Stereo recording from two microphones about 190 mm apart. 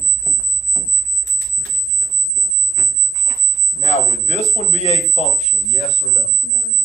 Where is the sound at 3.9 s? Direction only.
35° left (ahead or behind).